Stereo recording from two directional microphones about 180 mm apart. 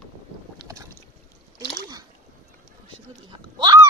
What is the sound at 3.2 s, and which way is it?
Goat, 25° right (ahead or behind).